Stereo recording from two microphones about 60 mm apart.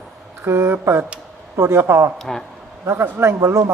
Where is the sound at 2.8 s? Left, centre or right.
Right.